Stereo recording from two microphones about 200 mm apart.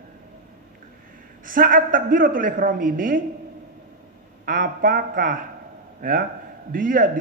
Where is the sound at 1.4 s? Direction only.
45° right (ahead or behind).